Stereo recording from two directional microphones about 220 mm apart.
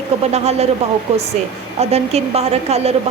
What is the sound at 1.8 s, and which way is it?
A woman's voice, 30° right (ahead or behind).